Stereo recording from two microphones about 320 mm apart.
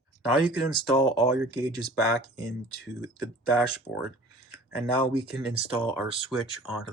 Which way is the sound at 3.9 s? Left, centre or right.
Left.